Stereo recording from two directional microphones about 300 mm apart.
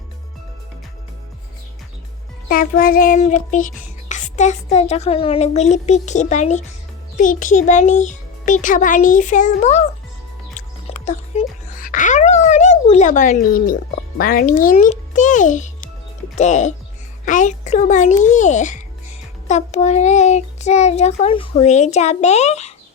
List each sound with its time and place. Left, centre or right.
2.5 s music: left
14.2 s a child's voice: left
17.2 s music: left